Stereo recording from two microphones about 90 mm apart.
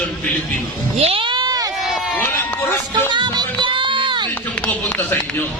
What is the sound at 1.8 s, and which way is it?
Run, centre (ahead or behind).